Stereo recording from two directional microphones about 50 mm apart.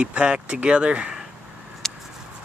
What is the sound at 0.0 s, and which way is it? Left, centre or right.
Speech, right.